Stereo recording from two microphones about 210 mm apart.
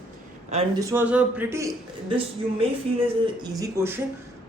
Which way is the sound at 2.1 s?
25° right (ahead or behind).